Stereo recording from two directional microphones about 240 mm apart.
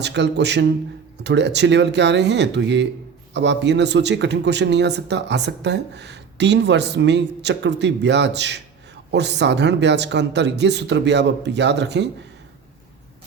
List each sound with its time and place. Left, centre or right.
0.0 s speech: right